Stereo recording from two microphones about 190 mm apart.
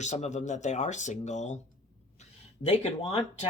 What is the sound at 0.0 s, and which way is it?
Speech, 40° left (ahead or behind).